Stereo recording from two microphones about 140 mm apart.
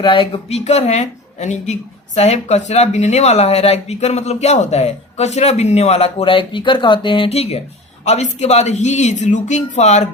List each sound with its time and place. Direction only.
0.0 s a woman's voice: 35° left (ahead or behind); by 10.1 s 55° left (ahead or behind)